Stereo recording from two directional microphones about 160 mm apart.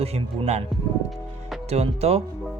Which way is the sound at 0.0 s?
40° right (ahead or behind).